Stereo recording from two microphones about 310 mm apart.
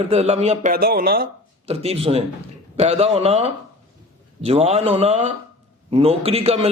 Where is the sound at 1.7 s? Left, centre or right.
Centre.